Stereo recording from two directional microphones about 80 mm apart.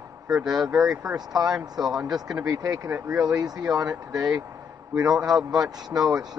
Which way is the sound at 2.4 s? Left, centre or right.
Right.